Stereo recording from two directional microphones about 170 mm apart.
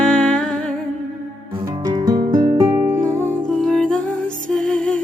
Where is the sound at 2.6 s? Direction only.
15° right (ahead or behind).